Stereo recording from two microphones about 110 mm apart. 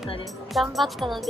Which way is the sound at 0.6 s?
Centre (ahead or behind).